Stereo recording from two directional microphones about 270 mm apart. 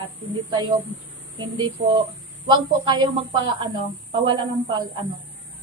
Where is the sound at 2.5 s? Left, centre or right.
Centre.